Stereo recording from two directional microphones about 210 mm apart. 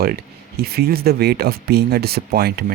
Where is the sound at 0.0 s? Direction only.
45° right (ahead or behind).